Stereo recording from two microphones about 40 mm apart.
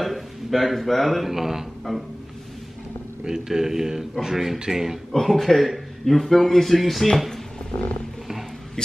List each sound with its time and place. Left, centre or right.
0.0 s speech: centre
1.9 s a man's voice: centre
3.3 s a man's voice: centre
5.1 s a man's voice: centre
7.7 s wild animals: left